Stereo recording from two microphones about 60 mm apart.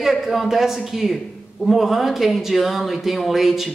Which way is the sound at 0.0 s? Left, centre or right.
Centre.